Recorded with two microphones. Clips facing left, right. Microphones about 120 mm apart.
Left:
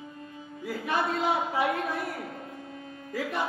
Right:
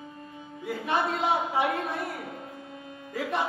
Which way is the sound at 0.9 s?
25° right (ahead or behind).